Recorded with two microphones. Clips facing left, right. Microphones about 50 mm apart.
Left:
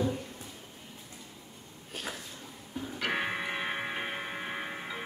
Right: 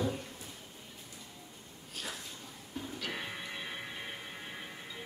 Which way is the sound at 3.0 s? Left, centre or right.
Left.